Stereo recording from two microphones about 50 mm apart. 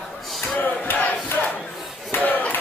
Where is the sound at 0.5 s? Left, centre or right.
Left.